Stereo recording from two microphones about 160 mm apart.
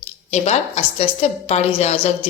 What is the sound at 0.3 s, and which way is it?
A woman's voice, 45° left (ahead or behind).